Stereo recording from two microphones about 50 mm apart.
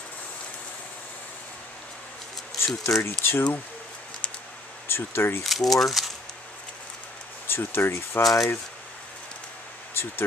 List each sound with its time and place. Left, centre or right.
2.6 s speech: left
4.8 s speech: left
5.4 s speech: centre
7.4 s speech: left
8.2 s speech: centre